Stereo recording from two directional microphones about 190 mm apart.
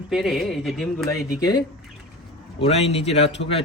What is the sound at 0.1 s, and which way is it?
Speech, centre (ahead or behind).